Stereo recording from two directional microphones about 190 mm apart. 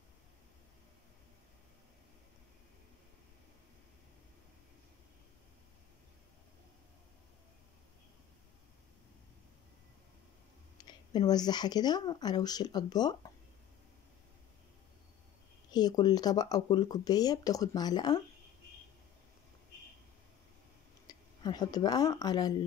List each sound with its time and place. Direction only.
10.8 s speech: 20° left (ahead or behind)
15.7 s speech: 20° left (ahead or behind)
21.1 s speech: 20° left (ahead or behind)